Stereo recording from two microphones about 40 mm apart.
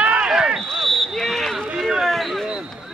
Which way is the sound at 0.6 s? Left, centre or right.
Centre.